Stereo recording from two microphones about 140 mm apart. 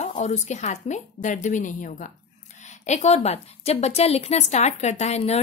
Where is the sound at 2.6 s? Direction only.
55° left (ahead or behind).